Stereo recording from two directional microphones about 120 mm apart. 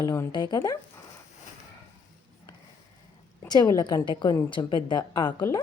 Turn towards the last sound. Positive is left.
turn(degrees=35)  # may be behind; listen again after turning